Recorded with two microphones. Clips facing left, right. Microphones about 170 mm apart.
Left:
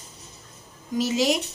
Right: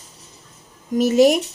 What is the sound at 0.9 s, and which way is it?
Speech, 55° right (ahead or behind).